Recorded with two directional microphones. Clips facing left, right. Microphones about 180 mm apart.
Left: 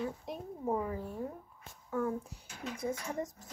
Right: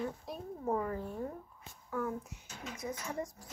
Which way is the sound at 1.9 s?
30° left (ahead or behind).